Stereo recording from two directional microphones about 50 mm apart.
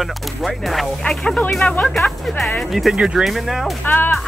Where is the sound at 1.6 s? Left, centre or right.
Left.